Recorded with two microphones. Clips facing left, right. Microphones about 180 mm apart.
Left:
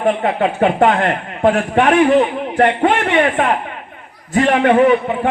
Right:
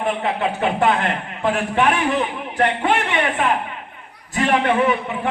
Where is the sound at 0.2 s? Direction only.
45° left (ahead or behind).